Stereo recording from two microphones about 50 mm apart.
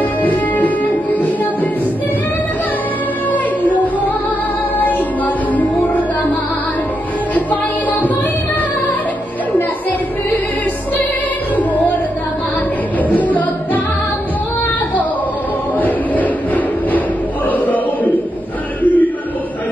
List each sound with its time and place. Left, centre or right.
0.0 s music: left
3.3 s music: left
11.7 s music: left
13.1 s music: left
15.8 s music: left
17.5 s a sound: left